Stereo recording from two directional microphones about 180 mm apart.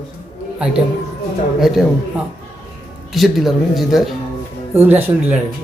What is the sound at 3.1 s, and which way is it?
Speech, centre (ahead or behind).